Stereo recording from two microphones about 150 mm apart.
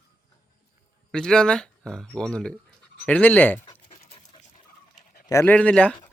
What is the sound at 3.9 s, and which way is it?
Dog, 45° left (ahead or behind).